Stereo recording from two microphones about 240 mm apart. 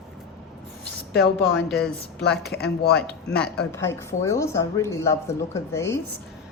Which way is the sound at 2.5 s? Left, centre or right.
Left.